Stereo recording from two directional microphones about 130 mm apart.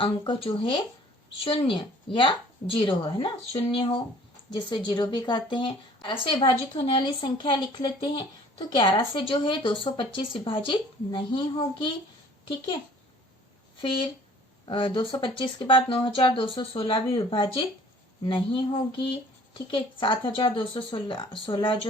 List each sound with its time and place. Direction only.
0.0 s speech: 45° left (ahead or behind)
14.7 s speech: 40° left (ahead or behind)